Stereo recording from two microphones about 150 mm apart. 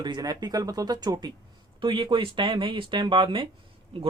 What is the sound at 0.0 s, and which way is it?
Speech, 30° right (ahead or behind).